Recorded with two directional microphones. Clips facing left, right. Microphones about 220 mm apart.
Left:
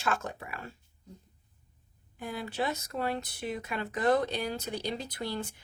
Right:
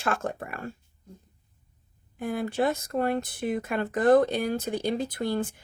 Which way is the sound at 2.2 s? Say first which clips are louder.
Right 7 dB; 50° right (ahead or behind).